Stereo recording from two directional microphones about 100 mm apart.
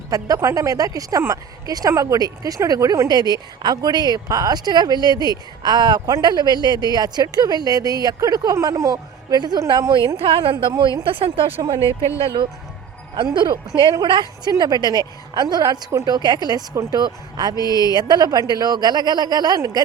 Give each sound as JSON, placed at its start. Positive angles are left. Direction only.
{"t": 0.1, "sound": "a woman's voice", "side_deg": -35}
{"t": 10.2, "sound": "a woman's voice", "side_deg": -60}
{"t": 13.3, "sound": "a woman's voice", "side_deg": -50}
{"t": 17.6, "sound": "speech", "side_deg": 40}
{"t": 17.9, "sound": "a woman's voice", "side_deg": -45}